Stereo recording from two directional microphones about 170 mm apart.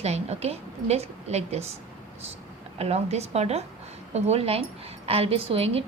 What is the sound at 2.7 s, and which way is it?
A woman's voice, 40° right (ahead or behind).